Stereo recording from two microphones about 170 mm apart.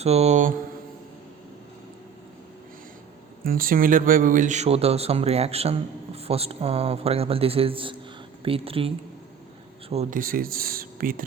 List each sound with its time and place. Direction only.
0.0 s speech: 40° right (ahead or behind)
3.4 s speech: 60° right (ahead or behind); by 8.9 s 35° right (ahead or behind)
9.9 s speech: 40° right (ahead or behind)
10.2 s speech: 60° right (ahead or behind)